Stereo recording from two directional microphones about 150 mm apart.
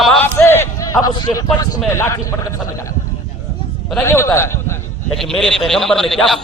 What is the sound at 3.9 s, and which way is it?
Speech, 20° left (ahead or behind).